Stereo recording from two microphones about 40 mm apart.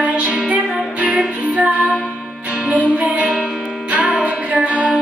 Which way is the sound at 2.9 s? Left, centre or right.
Right.